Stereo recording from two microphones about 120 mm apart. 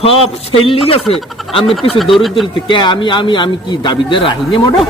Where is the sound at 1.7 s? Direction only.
Centre (ahead or behind).